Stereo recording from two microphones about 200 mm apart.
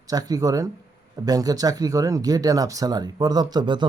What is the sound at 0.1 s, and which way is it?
Speech, 20° right (ahead or behind).